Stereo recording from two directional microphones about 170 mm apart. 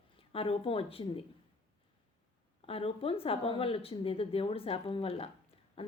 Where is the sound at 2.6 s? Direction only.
35° left (ahead or behind).